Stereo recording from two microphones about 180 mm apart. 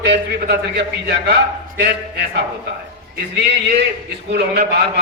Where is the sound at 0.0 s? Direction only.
70° right (ahead or behind).